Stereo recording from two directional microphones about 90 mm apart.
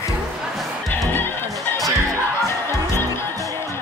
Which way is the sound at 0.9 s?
25° left (ahead or behind).